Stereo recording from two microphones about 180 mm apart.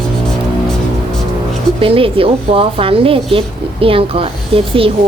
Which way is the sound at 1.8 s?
30° right (ahead or behind).